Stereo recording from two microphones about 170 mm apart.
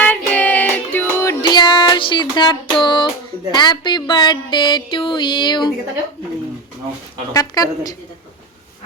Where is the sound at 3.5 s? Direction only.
25° left (ahead or behind).